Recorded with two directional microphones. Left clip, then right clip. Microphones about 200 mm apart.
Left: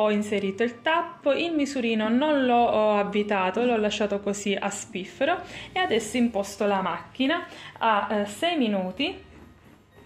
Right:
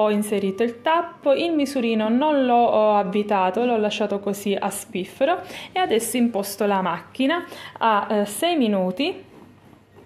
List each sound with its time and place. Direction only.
0.0 s a woman's voice: 30° right (ahead or behind); by 9.1 s 55° right (ahead or behind)